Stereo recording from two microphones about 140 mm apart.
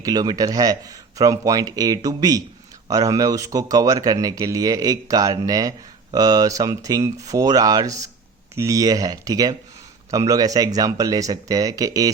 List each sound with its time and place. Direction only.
0.0 s speech: 25° right (ahead or behind)